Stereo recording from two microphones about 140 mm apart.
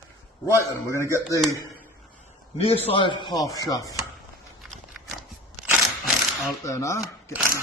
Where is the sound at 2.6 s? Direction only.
45° left (ahead or behind); by 3.9 s 25° left (ahead or behind).